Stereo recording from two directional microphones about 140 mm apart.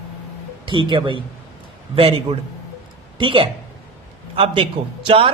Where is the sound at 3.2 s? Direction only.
40° right (ahead or behind).